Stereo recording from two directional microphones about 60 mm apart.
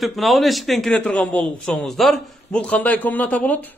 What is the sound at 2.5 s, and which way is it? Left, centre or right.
A man's voice, left.